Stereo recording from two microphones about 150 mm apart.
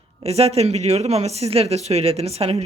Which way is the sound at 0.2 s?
40° right (ahead or behind).